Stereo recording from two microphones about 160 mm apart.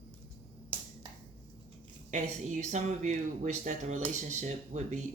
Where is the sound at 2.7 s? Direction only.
50° right (ahead or behind).